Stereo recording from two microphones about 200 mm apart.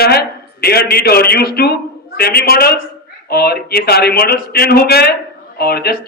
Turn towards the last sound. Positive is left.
turn(degrees=50)  # may be behind; listen again after turning